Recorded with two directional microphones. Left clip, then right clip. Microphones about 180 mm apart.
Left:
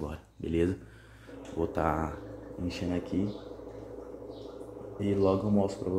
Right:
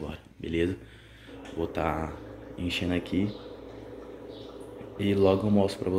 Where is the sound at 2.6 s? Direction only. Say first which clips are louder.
Right 4 dB; 25° right (ahead or behind).